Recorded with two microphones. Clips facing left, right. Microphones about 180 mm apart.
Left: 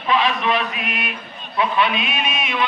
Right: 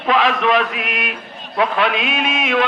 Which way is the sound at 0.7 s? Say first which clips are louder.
Right 3 dB; 90° right.